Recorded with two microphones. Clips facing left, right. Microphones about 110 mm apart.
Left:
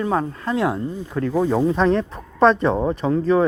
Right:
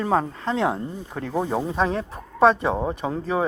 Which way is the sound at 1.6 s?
10° right (ahead or behind).